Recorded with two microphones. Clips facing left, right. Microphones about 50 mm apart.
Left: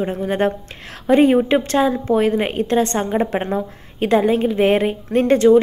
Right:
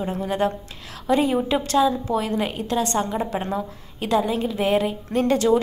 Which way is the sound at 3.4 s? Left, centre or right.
Left.